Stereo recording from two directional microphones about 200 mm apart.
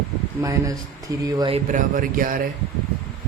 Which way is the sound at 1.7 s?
40° right (ahead or behind).